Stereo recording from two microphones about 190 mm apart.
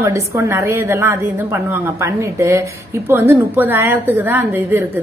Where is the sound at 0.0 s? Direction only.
15° right (ahead or behind).